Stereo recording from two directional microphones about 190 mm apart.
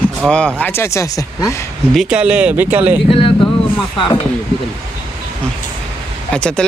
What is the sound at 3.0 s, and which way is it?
Speech, 30° left (ahead or behind).